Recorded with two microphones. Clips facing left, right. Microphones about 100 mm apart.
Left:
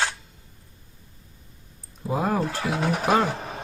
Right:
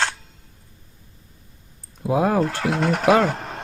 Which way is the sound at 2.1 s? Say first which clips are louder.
Right 5 dB; 90° right.